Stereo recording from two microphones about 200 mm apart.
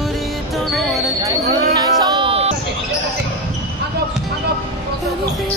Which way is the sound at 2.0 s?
25° right (ahead or behind).